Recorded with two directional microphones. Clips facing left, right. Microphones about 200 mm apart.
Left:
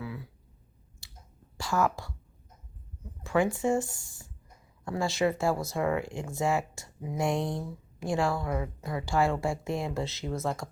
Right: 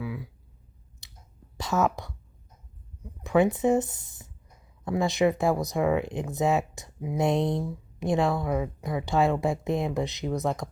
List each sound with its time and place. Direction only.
0.0 s a sound: 10° right (ahead or behind)
1.0 s chewing: 20° right (ahead or behind)
1.5 s speech: 20° right (ahead or behind)